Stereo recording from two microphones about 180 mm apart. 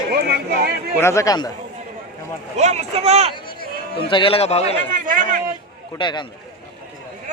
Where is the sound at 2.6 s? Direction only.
40° right (ahead or behind).